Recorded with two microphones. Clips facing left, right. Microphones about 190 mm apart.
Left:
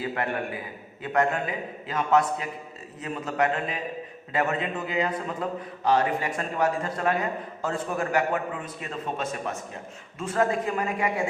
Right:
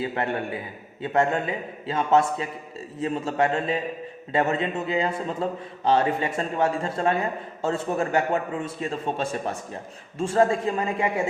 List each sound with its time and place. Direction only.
0.0 s a man's voice: 25° right (ahead or behind)